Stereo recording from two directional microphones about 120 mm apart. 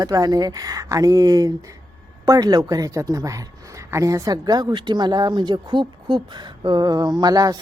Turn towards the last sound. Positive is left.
turn(degrees=-30)  # may be behind; listen again after turning